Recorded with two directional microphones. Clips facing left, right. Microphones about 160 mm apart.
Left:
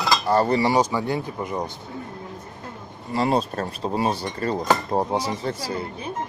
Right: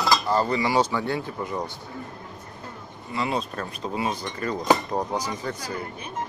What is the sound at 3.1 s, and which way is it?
Speech, 40° left (ahead or behind).